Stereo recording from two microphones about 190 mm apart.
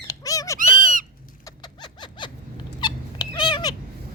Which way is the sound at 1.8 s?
25° left (ahead or behind).